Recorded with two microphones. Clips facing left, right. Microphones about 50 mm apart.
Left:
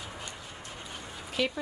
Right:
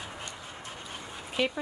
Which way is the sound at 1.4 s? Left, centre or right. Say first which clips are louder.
Right 1 dB; right.